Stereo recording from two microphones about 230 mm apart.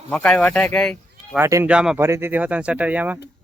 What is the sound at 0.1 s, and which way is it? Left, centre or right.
Speech, centre.